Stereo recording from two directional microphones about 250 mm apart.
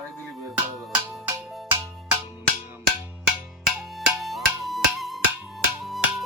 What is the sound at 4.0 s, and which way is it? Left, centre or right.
Music, centre.